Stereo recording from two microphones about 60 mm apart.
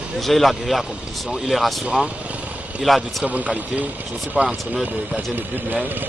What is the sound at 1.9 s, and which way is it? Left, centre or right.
Vehicle, right.